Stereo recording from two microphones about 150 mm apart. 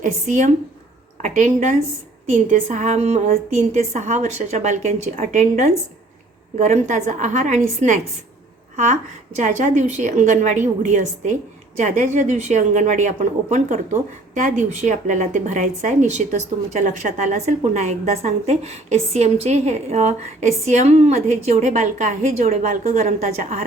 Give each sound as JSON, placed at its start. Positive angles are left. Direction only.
{"t": 0.0, "sound": "speech", "side_deg": -50}